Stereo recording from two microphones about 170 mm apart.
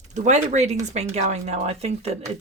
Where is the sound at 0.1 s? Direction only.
45° right (ahead or behind).